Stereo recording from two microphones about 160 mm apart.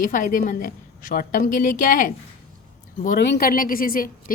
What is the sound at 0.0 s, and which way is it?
A woman's voice, 55° left (ahead or behind).